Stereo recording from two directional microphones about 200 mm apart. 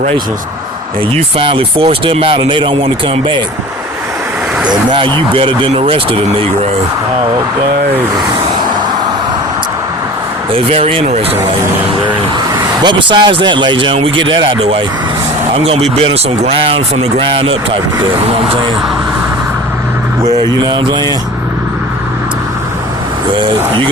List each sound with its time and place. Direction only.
1.4 s speech: 25° right (ahead or behind)
4.7 s speech: 25° right (ahead or behind)
10.5 s speech: 30° right (ahead or behind)
12.8 s speech: 20° right (ahead or behind)
20.4 s speech: 20° right (ahead or behind)